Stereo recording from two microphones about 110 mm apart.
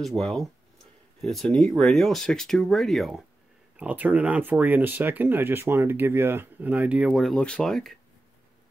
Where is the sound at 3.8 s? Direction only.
15° right (ahead or behind).